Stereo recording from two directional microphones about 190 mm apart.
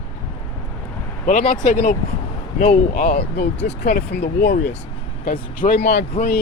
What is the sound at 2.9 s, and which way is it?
Speech, 50° left (ahead or behind).